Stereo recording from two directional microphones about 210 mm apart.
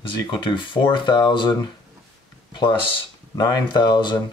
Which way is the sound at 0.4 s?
20° left (ahead or behind).